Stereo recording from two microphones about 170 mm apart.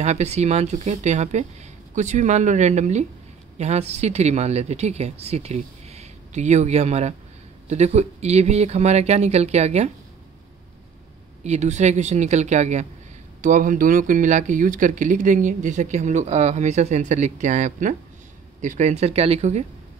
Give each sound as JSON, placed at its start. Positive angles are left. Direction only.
{"t": 0.0, "sound": "speech", "side_deg": -40}
{"t": 11.4, "sound": "speech", "side_deg": -40}